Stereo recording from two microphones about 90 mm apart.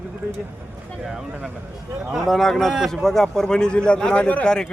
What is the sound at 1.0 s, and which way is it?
A man's voice, 5° right (ahead or behind).